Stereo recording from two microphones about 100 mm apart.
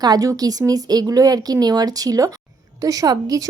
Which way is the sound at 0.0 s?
40° right (ahead or behind).